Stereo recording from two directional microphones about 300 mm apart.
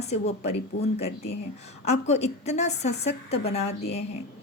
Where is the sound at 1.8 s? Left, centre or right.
Left.